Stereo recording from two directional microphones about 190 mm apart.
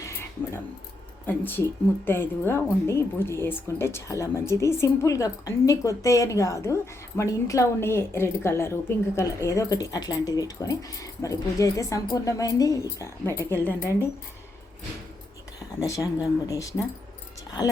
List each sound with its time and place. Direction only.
0.0 s a sound: 15° left (ahead or behind)
1.3 s a woman's voice: 10° left (ahead or behind)
15.8 s a woman's voice: 15° left (ahead or behind)